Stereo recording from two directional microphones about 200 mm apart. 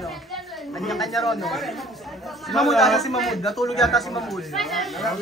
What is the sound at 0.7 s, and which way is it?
Speech, centre (ahead or behind).